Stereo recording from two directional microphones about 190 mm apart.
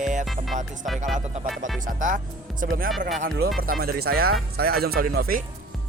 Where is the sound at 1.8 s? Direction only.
45° right (ahead or behind).